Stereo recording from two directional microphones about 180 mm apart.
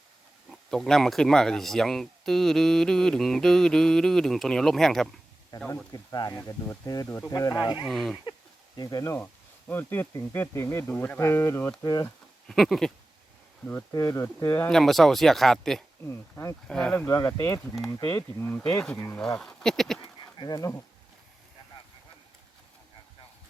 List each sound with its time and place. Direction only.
0.5 s speech: centre (ahead or behind); by 7.9 s 25° left (ahead or behind)
7.9 s speech: centre (ahead or behind)
8.2 s speech: 25° left (ahead or behind)
12.5 s speech: centre (ahead or behind)
13.7 s speech: 15° left (ahead or behind)
16.0 s speech: 15° left (ahead or behind)
16.6 s speech: 5° left (ahead or behind)
20.0 s insect: 20° left (ahead or behind)